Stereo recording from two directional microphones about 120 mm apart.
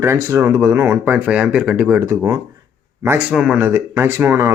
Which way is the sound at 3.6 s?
20° right (ahead or behind).